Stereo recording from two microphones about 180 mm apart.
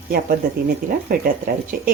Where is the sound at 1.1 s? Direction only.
50° right (ahead or behind).